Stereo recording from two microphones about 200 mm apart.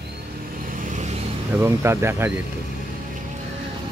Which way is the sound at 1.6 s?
10° right (ahead or behind).